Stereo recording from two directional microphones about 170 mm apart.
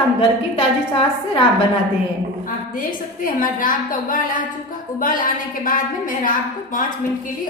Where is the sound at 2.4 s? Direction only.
55° left (ahead or behind).